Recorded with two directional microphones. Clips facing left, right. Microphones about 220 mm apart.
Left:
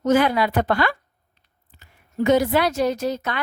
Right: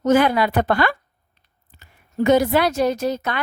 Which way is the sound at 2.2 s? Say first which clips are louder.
Right 2 dB; 50° right (ahead or behind).